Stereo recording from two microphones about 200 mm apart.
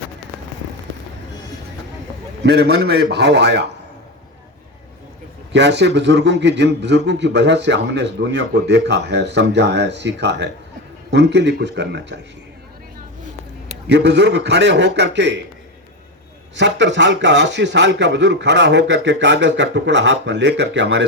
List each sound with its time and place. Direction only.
2.4 s a man's voice: 55° right (ahead or behind)
5.5 s a man's voice: 60° right (ahead or behind)
13.8 s a man's voice: 60° right (ahead or behind)
16.6 s a man's voice: 65° right (ahead or behind)